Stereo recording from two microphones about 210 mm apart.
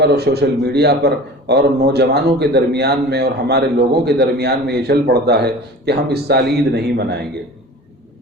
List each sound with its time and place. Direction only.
0.0 s a man's voice: 50° right (ahead or behind)